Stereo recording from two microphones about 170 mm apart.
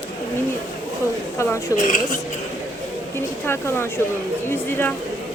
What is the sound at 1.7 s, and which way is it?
Speech, 50° left (ahead or behind).